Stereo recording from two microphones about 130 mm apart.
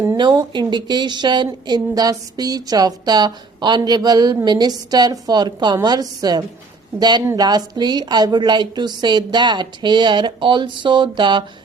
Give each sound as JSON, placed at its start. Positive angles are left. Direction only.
{"t": 0.2, "sound": "a woman's voice", "side_deg": -35}